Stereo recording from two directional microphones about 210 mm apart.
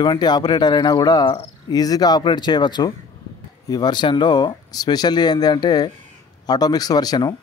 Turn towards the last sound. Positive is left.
turn(degrees=20)  # may be behind; listen again after turning